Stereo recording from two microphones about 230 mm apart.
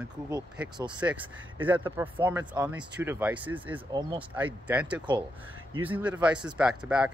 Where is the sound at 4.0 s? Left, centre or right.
Right.